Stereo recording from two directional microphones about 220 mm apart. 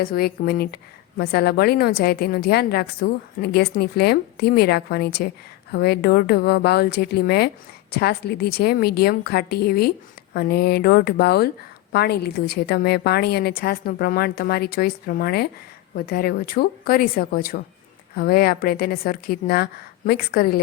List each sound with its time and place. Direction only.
0.0 s a woman's voice: 45° left (ahead or behind)